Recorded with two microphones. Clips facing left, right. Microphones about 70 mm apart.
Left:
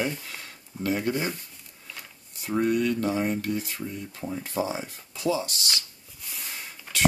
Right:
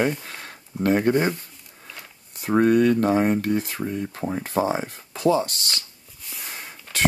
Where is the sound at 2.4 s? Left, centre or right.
Right.